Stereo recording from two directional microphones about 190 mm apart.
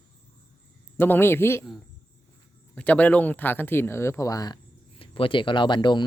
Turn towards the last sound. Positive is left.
turn(degrees=25)  # may be behind; listen again after turning